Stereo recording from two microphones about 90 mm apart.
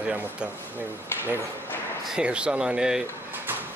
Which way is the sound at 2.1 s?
10° right (ahead or behind).